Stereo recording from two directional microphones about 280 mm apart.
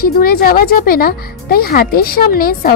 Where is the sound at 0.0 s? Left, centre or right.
Left.